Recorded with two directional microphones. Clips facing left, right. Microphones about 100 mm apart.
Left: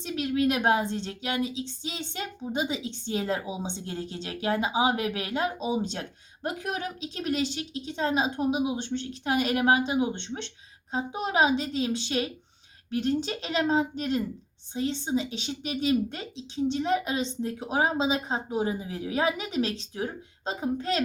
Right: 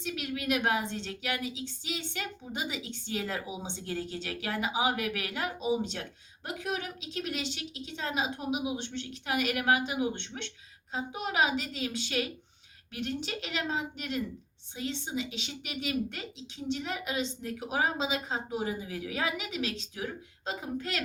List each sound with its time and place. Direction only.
0.0 s a woman's voice: 30° left (ahead or behind)
5.9 s a woman's voice: 40° left (ahead or behind)